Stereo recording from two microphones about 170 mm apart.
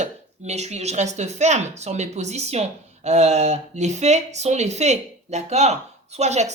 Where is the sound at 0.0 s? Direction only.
40° right (ahead or behind).